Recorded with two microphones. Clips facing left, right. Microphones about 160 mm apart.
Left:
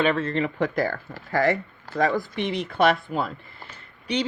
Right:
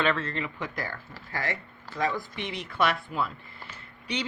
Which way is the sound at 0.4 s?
35° left (ahead or behind).